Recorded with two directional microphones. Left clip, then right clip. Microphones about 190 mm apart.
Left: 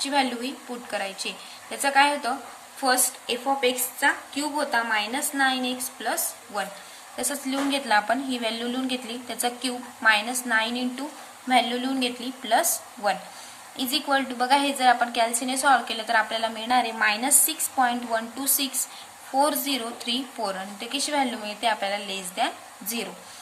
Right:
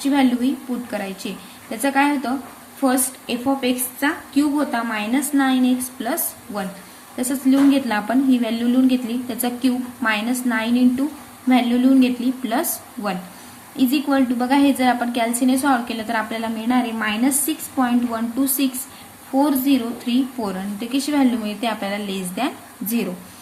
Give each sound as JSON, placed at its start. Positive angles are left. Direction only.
{"t": 0.1, "sound": "a woman's voice", "side_deg": 10}